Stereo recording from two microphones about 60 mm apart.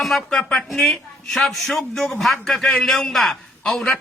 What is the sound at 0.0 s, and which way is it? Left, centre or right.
Speech, centre.